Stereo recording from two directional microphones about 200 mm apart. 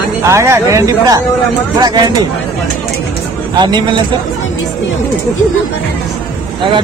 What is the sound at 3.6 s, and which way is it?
Speech, 20° right (ahead or behind).